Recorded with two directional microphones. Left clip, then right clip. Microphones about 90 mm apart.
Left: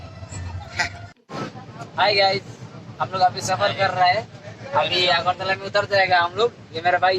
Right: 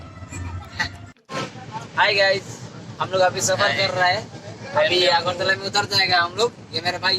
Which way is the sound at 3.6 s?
35° left (ahead or behind).